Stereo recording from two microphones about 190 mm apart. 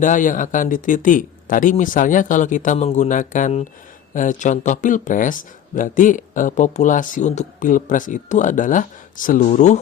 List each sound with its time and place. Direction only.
0.0 s speech: 45° left (ahead or behind)